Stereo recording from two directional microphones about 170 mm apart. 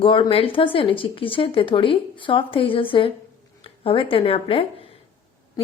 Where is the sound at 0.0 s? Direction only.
30° left (ahead or behind).